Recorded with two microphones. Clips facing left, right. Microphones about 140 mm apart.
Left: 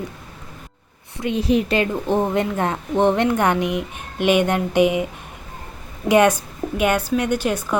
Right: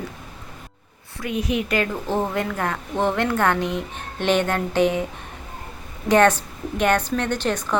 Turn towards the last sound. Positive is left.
turn(degrees=10)  # may be behind; listen again after turning